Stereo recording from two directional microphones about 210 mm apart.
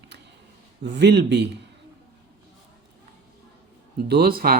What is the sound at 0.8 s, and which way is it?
Speech, 55° right (ahead or behind).